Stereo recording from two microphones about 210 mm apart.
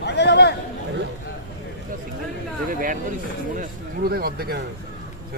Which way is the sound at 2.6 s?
40° right (ahead or behind).